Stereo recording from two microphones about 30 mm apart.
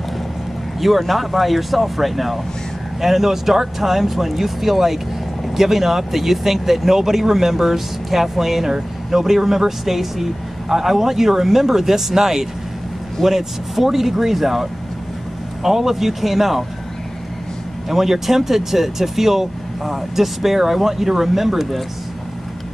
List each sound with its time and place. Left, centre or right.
0.7 s speech: centre
17.8 s speech: centre